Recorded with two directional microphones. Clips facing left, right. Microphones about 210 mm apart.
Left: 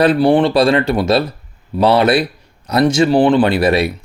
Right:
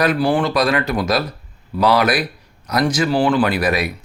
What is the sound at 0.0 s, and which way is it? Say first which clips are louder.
Speech: left 6 dB; 30° left (ahead or behind).